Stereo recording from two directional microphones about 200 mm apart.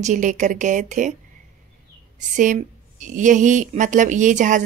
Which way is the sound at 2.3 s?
40° right (ahead or behind).